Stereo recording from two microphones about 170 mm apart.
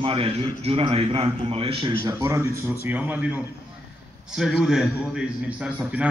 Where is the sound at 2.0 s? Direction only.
15° right (ahead or behind).